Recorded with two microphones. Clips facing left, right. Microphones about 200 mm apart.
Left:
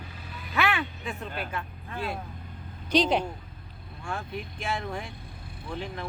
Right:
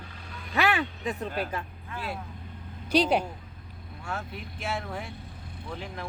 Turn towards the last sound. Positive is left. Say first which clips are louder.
# left 1 dB
turn(degrees=-5)  # may be behind; listen again after turning